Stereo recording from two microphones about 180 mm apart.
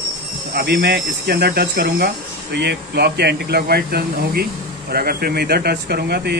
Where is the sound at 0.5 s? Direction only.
60° right (ahead or behind).